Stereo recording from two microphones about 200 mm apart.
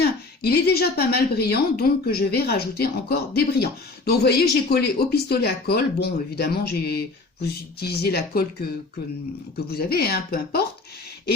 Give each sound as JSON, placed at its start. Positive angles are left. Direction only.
{"t": 0.0, "sound": "a woman's voice", "side_deg": 50}
{"t": 9.6, "sound": "a woman's voice", "side_deg": 50}